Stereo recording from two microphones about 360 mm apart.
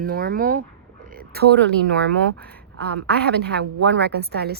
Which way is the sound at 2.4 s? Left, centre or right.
Centre.